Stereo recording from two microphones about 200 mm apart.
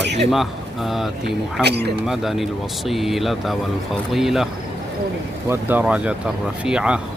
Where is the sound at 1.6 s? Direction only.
55° right (ahead or behind).